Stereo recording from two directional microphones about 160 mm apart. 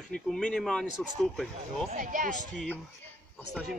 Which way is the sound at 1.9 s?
55° right (ahead or behind).